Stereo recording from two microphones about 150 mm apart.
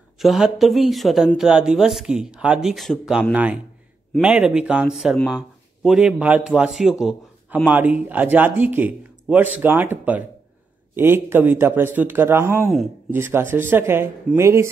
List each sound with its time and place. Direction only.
0.2 s speech: centre (ahead or behind); by 14.7 s 20° right (ahead or behind)